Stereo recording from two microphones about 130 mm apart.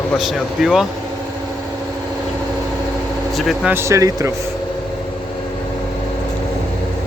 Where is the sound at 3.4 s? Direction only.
Centre (ahead or behind).